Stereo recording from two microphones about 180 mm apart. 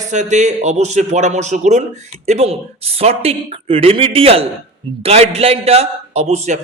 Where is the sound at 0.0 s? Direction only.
40° right (ahead or behind).